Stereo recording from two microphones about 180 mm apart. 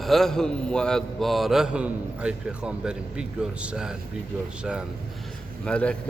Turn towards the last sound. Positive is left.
turn(degrees=5)  # may be behind; listen again after turning